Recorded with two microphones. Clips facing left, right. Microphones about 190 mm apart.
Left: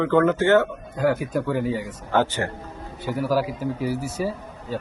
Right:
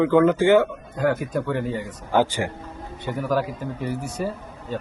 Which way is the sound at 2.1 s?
10° right (ahead or behind).